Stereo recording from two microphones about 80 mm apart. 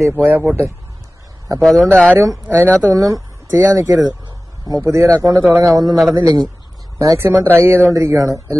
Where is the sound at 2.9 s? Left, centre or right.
Right.